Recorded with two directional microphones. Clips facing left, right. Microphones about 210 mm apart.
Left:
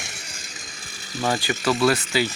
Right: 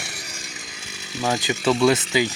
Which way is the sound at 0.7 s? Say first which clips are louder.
Even; 10° right (ahead or behind).